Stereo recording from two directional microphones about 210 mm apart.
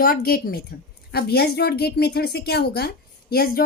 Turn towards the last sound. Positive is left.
turn(degrees=45)  # may be behind; listen again after turning